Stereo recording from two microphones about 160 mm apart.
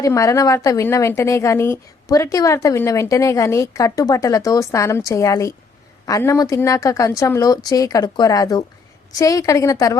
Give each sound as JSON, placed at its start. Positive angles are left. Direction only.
{"t": 0.0, "sound": "a woman's voice", "side_deg": 20}